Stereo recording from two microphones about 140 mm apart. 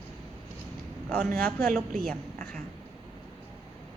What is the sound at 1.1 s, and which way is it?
Speech, 10° left (ahead or behind).